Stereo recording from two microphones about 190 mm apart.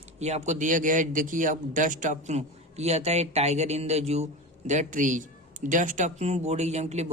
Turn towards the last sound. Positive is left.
turn(degrees=-35)  # may be behind; listen again after turning